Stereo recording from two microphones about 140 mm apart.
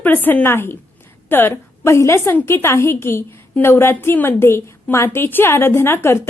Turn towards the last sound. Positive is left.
turn(degrees=15)  # may be behind; listen again after turning